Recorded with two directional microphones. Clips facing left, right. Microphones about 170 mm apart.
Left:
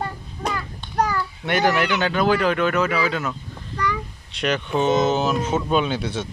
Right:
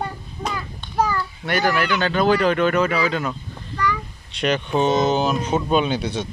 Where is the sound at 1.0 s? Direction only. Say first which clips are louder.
Right 1 dB; centre (ahead or behind).